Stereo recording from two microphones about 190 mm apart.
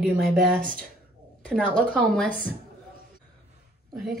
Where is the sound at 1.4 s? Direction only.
5° left (ahead or behind).